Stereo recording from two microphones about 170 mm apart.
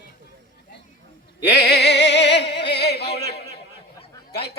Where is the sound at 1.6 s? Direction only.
75° left (ahead or behind).